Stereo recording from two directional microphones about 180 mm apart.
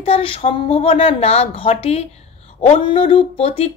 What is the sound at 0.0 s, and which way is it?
Speech, 30° left (ahead or behind).